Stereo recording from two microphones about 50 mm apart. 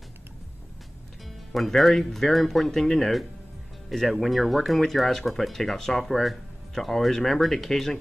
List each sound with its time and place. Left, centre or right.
1.5 s speech: centre